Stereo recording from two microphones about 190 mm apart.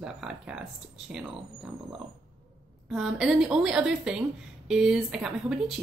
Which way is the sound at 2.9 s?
5° right (ahead or behind).